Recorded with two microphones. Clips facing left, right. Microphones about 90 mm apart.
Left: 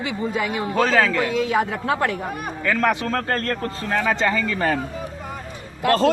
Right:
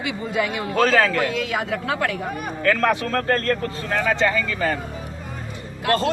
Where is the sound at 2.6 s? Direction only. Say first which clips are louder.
Right 1 dB; 15° left (ahead or behind).